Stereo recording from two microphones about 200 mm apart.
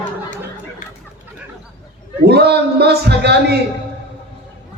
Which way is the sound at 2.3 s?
55° right (ahead or behind).